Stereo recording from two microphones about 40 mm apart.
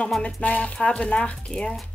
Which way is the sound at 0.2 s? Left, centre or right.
Left.